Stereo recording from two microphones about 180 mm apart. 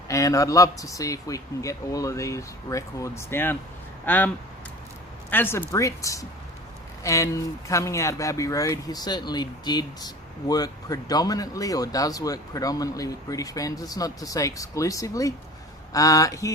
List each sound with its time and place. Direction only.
0.1 s a man's voice: 20° left (ahead or behind)
5.3 s a man's voice: 10° left (ahead or behind)